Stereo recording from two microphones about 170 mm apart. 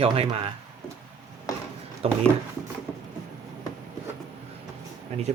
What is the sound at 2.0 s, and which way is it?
Speech, 35° right (ahead or behind).